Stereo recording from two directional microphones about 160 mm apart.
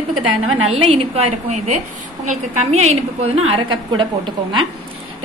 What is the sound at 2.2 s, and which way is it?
A woman's voice, 45° right (ahead or behind).